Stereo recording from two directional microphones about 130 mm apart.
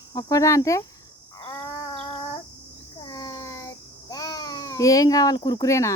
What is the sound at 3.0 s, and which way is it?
Babbling, 30° left (ahead or behind).